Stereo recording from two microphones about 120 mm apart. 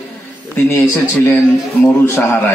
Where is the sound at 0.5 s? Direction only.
25° left (ahead or behind).